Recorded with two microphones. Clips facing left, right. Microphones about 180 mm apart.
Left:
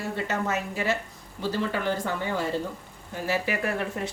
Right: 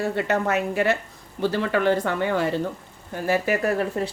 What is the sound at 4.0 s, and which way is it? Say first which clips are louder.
Speech: right 5 dB; 35° right (ahead or behind).